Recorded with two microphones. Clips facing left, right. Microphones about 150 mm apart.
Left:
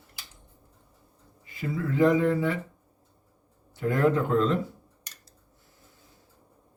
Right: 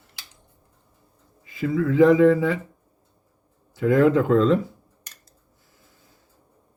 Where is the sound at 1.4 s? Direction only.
90° right.